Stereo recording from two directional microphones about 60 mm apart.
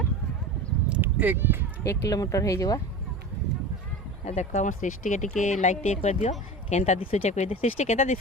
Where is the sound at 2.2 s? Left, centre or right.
Left.